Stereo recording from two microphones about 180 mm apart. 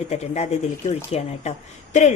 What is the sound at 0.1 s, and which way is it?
Speech, 35° left (ahead or behind).